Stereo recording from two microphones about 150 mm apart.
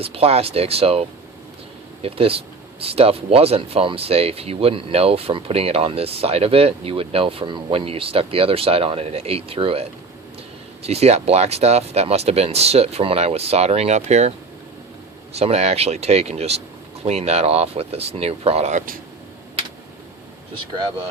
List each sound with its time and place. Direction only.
0.0 s speech: 40° right (ahead or behind)
10.8 s speech: 45° right (ahead or behind)
15.4 s speech: 45° right (ahead or behind)